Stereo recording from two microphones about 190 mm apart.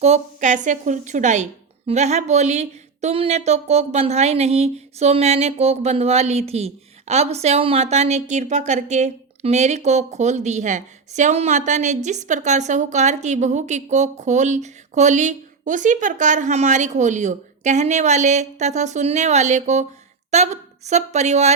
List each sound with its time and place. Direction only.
0.0 s a woman's voice: 35° right (ahead or behind)